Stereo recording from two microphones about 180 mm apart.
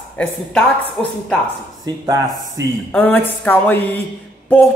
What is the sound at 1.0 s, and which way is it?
Speech, 5° left (ahead or behind).